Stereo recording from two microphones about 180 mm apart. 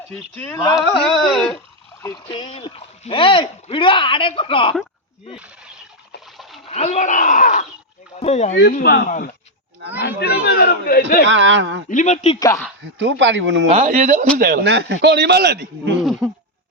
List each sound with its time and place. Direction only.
0.1 s speech: 5° left (ahead or behind)
0.5 s speech: 20° left (ahead or behind)
1.3 s a sound: centre (ahead or behind)
2.0 s speech: 15° left (ahead or behind)
2.3 s speech: 30° left (ahead or behind)
6.3 s splash: centre (ahead or behind)
6.7 s speech: 40° left (ahead or behind)
8.7 s speech: 60° left (ahead or behind)
11.3 s speech: 90° right
11.9 s speech: 45° left (ahead or behind)
13.0 s speech: 90° right
13.7 s speech: 40° right (ahead or behind)
14.3 s speech: 55° right (ahead or behind)
16.0 s a sound: 5° right (ahead or behind)